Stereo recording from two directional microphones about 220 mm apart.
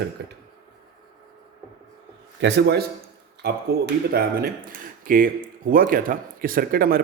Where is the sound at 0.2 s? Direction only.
50° right (ahead or behind).